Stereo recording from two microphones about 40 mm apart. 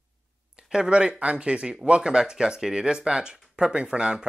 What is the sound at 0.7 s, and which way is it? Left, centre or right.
Speech, right.